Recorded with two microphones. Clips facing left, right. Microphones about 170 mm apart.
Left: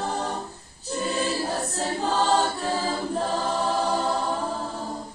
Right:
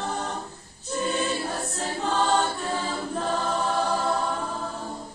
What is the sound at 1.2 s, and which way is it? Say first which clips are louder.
Choir: left 2 dB; 35° left (ahead or behind).